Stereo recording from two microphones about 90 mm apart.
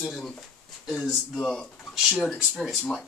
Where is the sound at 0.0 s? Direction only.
5° left (ahead or behind).